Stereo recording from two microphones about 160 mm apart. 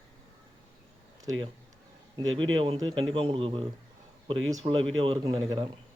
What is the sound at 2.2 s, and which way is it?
A man's voice, 30° right (ahead or behind).